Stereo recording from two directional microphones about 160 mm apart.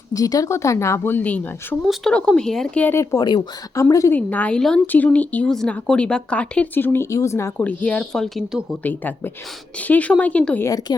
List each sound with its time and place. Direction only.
0.1 s speech: 20° left (ahead or behind); by 8.6 s centre (ahead or behind)
8.8 s speech: 10° left (ahead or behind)
10.7 s speech: 25° left (ahead or behind)